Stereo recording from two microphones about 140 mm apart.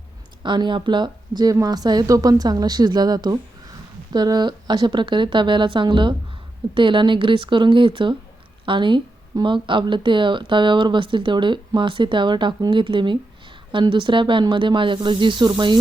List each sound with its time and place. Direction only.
0.4 s speech: 35° right (ahead or behind)